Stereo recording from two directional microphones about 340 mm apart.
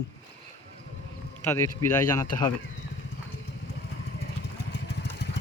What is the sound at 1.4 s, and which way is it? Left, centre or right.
Speech, centre.